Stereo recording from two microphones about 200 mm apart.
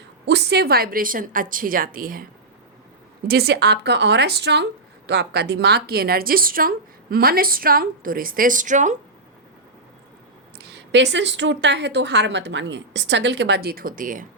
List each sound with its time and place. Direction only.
0.3 s speech: 60° right (ahead or behind)
3.2 s speech: 50° right (ahead or behind)
10.7 s speech: 60° right (ahead or behind); by 14.3 s 45° right (ahead or behind)